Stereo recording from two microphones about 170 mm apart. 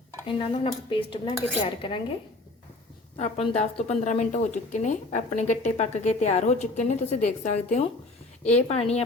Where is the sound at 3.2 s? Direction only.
40° left (ahead or behind).